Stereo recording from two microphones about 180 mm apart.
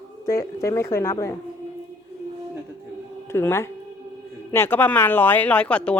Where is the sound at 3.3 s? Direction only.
15° left (ahead or behind).